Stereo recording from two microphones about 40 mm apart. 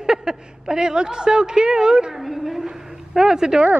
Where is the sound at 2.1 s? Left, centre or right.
Centre.